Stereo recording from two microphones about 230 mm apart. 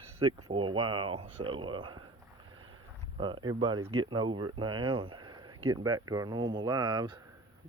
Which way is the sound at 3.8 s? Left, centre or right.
Right.